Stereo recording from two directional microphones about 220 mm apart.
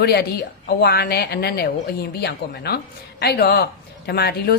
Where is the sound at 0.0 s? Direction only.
45° left (ahead or behind).